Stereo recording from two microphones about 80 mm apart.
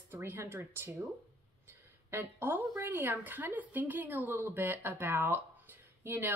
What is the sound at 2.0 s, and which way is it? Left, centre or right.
A woman's voice, right.